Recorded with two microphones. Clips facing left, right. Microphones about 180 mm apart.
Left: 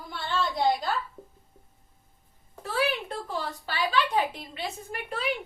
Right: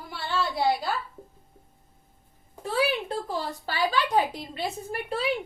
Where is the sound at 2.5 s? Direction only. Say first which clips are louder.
Right 2 dB; 15° right (ahead or behind).